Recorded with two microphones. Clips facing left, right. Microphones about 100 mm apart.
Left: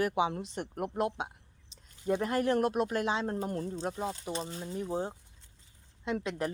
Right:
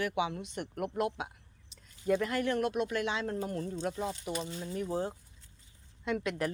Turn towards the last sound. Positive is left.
turn(degrees=30)  # may be behind; listen again after turning